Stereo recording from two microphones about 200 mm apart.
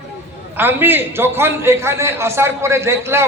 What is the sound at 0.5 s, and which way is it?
A man's voice, 10° right (ahead or behind).